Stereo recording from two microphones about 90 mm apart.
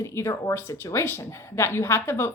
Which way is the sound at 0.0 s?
30° left (ahead or behind).